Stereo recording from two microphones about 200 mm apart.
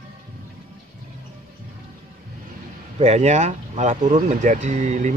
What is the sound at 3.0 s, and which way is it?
Speech, 35° right (ahead or behind).